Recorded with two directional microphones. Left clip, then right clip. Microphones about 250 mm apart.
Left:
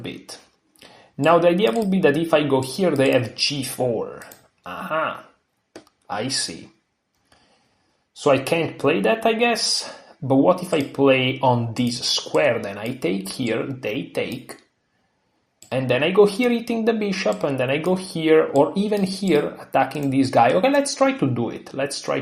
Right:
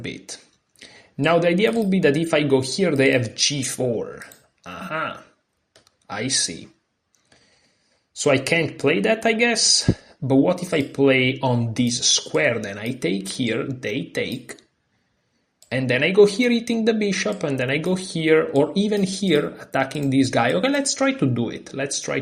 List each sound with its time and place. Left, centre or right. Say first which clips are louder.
0.0 s speech: right 1 dB; right
8.2 s speech: even; right
15.7 s speech: even; right